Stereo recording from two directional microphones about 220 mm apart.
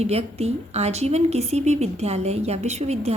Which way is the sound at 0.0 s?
30° right (ahead or behind).